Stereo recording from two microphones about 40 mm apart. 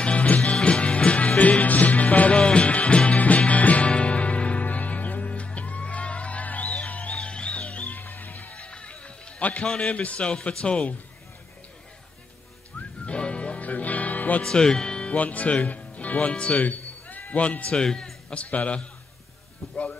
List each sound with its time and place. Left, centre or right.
0.0 s music: left
8.6 s music: left
9.7 s speech: left
12.7 s music: left
14.4 s speech: centre
15.1 s speech: left
16.5 s a man's voice: left
17.7 s speech: centre
18.3 s a man's voice: left
19.6 s speech: centre